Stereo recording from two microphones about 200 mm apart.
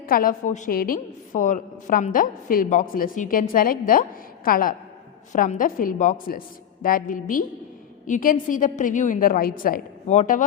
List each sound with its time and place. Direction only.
0.1 s a woman's voice: 45° left (ahead or behind)